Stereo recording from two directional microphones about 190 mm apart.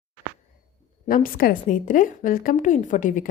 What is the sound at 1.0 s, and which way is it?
A woman's voice, 45° left (ahead or behind).